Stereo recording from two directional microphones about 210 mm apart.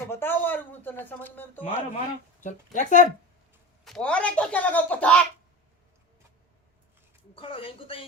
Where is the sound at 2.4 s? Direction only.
35° left (ahead or behind).